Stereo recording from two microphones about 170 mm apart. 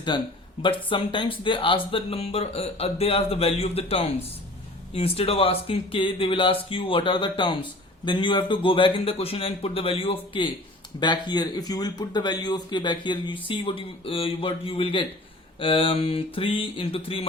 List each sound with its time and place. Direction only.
0.1 s speech: 25° left (ahead or behind)